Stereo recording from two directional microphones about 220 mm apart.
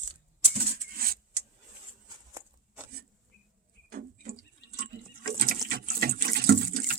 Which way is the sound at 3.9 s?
40° right (ahead or behind).